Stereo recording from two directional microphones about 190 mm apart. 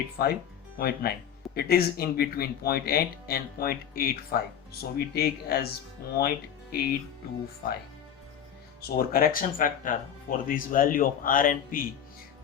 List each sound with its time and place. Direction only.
0.2 s speech: 50° left (ahead or behind)
8.8 s speech: 50° left (ahead or behind)